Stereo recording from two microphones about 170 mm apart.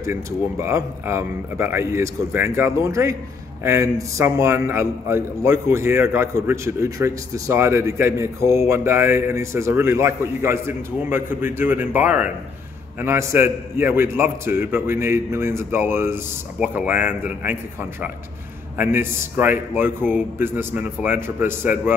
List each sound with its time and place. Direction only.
0.0 s a man's voice: 15° right (ahead or behind)
18.8 s a man's voice: 10° right (ahead or behind)